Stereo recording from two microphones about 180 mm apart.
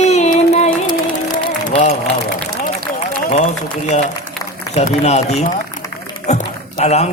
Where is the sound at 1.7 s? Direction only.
35° left (ahead or behind).